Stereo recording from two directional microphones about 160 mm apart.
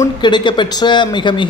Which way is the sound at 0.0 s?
30° left (ahead or behind).